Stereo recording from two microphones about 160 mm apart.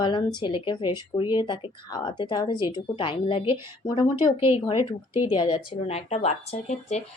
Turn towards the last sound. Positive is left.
turn(degrees=45)  # may be behind; listen again after turning